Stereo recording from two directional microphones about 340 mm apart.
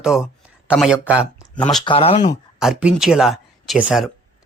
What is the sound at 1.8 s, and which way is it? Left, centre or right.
Speech, centre.